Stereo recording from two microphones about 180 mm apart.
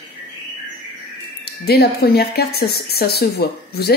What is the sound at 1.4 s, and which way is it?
Speech, 60° left (ahead or behind).